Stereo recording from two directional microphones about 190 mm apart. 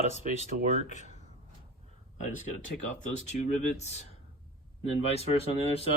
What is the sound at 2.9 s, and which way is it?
Speech, 40° left (ahead or behind).